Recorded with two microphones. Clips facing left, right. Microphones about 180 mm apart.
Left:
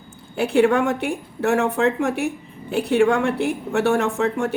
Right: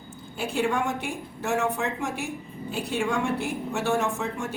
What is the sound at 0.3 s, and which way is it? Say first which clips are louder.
A woman's voice: left 9 dB; 65° left (ahead or behind).